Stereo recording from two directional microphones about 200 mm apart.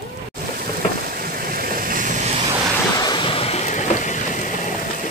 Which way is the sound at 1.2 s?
45° right (ahead or behind).